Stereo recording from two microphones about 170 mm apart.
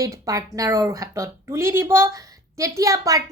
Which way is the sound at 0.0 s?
20° right (ahead or behind).